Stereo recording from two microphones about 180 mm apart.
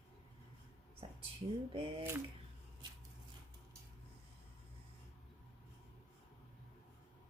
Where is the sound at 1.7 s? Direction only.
30° right (ahead or behind).